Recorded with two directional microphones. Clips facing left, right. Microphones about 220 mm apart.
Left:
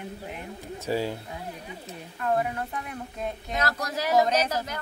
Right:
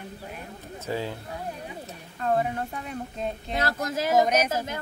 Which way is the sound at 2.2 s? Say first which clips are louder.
Right 1 dB; 25° right (ahead or behind).